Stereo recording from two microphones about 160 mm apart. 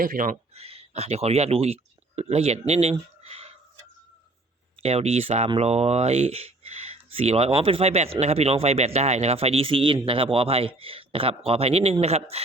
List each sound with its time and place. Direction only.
0.0 s speech: 60° right (ahead or behind)
0.5 s speech: 40° right (ahead or behind)
3.2 s a sound: 35° right (ahead or behind)
4.8 s speech: 40° right (ahead or behind)